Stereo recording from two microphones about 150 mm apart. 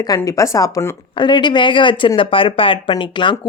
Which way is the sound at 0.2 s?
20° left (ahead or behind).